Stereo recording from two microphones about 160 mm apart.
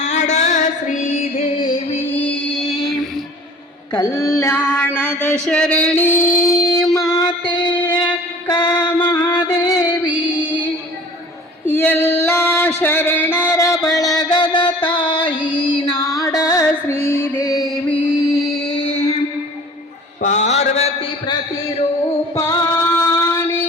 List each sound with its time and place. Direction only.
0.0 s female singing: 45° left (ahead or behind)
2.0 s music: 10° left (ahead or behind)
3.9 s a sound: 20° left (ahead or behind)
8.4 s music: 30° left (ahead or behind)
11.7 s female singing: 10° left (ahead or behind)
14.2 s music: 25° left (ahead or behind)
18.9 s music: 40° left (ahead or behind)
20.2 s mantra: 50° left (ahead or behind)
22.4 s female singing: 15° left (ahead or behind)